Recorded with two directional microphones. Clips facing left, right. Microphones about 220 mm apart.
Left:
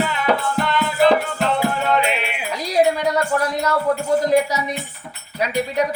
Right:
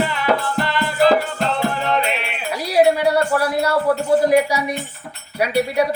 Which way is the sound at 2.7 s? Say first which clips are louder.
Right 3 dB; 10° right (ahead or behind).